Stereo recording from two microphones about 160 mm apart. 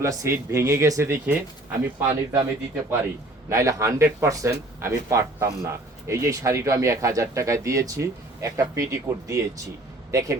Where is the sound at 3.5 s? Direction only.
20° right (ahead or behind).